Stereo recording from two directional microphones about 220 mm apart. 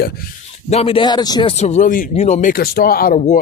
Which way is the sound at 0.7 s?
25° left (ahead or behind).